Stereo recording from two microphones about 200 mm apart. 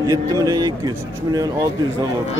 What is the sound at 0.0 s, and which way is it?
A man's voice, 20° right (ahead or behind).